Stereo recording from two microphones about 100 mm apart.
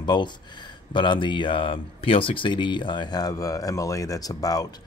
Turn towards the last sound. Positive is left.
turn(degrees=40)  # may be behind; listen again after turning